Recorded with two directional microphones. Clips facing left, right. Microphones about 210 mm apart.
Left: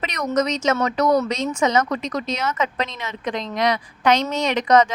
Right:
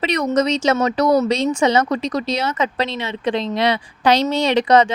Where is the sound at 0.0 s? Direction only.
30° right (ahead or behind).